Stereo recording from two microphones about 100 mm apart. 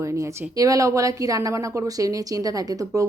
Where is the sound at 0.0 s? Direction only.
35° right (ahead or behind).